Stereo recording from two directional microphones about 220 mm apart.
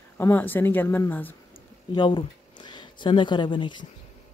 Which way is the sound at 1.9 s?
20° left (ahead or behind).